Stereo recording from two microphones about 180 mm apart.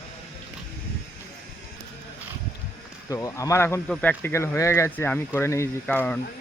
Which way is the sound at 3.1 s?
20° left (ahead or behind).